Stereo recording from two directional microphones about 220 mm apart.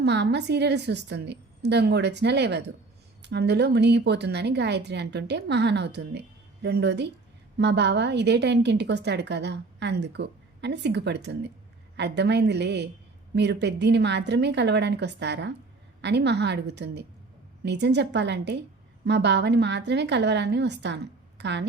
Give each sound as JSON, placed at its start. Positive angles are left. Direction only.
{"t": 0.0, "sound": "a woman's voice", "side_deg": -50}